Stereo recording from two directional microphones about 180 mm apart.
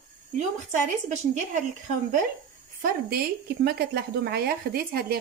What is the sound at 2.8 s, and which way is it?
Speech, 60° right (ahead or behind).